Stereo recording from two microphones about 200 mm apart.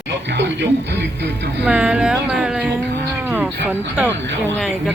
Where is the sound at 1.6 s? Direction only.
5° right (ahead or behind).